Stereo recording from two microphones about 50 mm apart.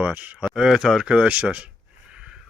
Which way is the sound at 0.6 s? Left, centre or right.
Centre.